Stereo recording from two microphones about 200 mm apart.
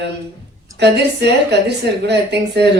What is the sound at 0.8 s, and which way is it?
Speech, 55° right (ahead or behind).